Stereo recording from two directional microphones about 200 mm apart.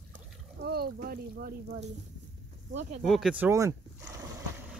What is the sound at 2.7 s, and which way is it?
Speech, 35° right (ahead or behind).